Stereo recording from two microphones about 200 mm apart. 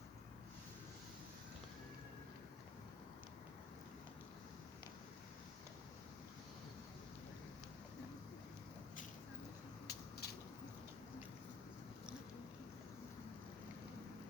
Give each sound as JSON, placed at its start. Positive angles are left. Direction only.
{"t": 9.8, "sound": "mechanisms", "side_deg": 50}